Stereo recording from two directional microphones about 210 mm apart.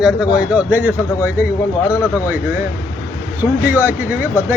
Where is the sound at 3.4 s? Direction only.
10° right (ahead or behind).